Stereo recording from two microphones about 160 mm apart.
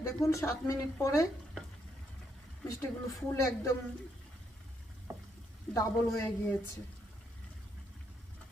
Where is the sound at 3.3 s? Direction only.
20° left (ahead or behind).